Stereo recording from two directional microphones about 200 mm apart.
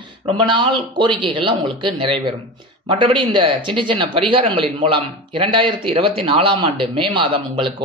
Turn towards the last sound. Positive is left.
turn(degrees=-25)  # may be behind; listen again after turning